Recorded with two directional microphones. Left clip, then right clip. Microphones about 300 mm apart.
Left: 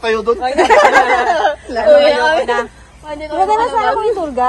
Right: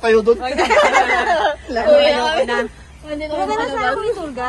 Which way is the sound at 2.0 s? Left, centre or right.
Left.